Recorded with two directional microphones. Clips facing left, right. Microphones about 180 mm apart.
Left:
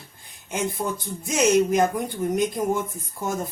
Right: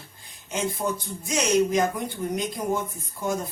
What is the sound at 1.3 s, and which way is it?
Speech, 50° left (ahead or behind).